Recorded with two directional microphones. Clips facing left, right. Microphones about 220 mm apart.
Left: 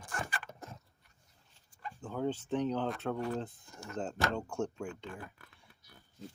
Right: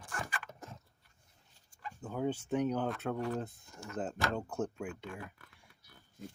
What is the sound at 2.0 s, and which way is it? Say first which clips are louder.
Speech: even; 10° right (ahead or behind).